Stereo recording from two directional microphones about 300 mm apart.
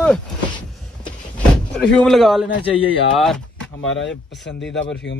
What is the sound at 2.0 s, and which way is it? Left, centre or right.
Speech, centre.